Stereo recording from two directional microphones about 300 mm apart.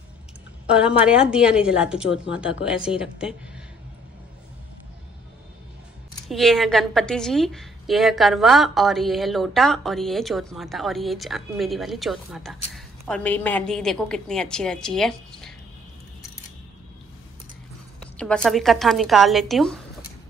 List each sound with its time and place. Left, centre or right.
0.7 s a woman's voice: centre
6.2 s a woman's voice: centre
18.1 s a woman's voice: centre